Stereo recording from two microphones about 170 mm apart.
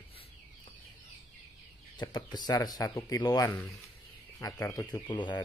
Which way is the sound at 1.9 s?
25° left (ahead or behind).